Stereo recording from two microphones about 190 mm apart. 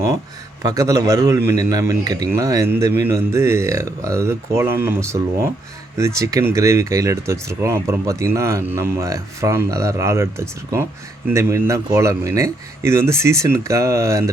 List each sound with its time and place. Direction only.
0.6 s speech: 15° right (ahead or behind)